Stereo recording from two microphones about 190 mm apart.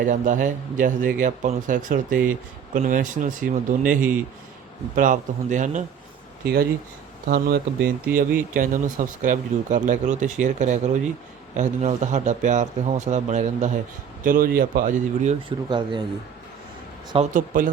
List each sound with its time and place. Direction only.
0.0 s speech: 40° right (ahead or behind)
6.4 s speech: 55° right (ahead or behind); by 13.7 s 40° right (ahead or behind)
14.3 s speech: 50° right (ahead or behind)
15.4 s speech: 25° right (ahead or behind)
17.3 s speech: 45° right (ahead or behind)